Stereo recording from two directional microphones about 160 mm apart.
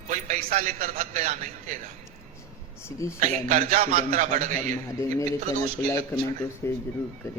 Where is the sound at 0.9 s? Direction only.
45° right (ahead or behind).